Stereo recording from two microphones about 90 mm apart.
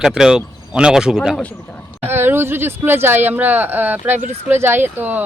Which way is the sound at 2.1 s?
25° right (ahead or behind).